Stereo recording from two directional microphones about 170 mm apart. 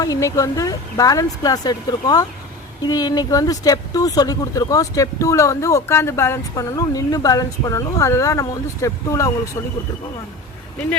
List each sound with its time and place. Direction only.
0.0 s speech: 20° left (ahead or behind)